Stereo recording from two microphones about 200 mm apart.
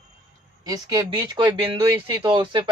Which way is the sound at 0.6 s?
20° right (ahead or behind).